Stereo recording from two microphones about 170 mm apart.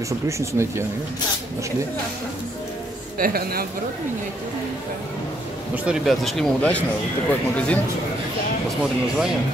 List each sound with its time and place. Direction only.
0.4 s speech: 15° right (ahead or behind)
3.2 s speech: 60° right (ahead or behind)
5.9 s speech: centre (ahead or behind)